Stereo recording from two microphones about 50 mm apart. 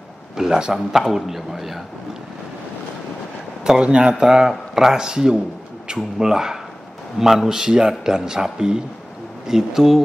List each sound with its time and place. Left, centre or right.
0.4 s a man's voice: centre
3.8 s speech: right
4.1 s speech: centre